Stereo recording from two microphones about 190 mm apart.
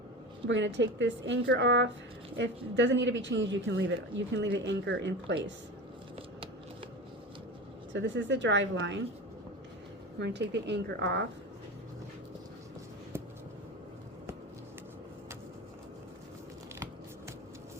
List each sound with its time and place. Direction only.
0.4 s speech: 70° right (ahead or behind)
7.9 s speech: 70° right (ahead or behind)
10.2 s speech: 65° right (ahead or behind)